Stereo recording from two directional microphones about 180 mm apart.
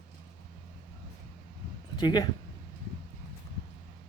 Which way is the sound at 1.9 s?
25° left (ahead or behind).